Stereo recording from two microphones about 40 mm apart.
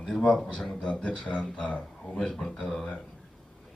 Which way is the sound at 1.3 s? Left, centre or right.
Left.